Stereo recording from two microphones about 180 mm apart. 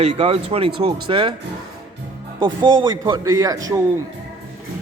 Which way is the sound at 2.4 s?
25° right (ahead or behind).